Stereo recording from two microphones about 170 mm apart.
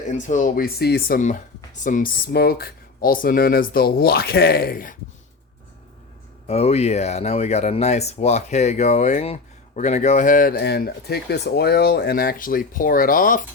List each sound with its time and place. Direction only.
0.1 s speech: 45° left (ahead or behind)
2.3 s speech: 65° left (ahead or behind)
6.5 s speech: 40° left (ahead or behind); by 13.4 s 55° left (ahead or behind)